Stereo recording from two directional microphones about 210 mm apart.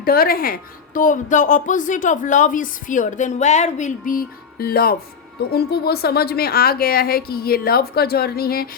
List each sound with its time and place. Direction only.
0.0 s a woman's voice: 45° left (ahead or behind)